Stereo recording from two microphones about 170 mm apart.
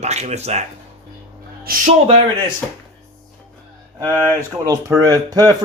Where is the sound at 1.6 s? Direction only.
55° right (ahead or behind).